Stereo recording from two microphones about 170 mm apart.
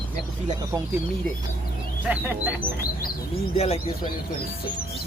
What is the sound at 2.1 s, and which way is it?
Bird, 10° right (ahead or behind).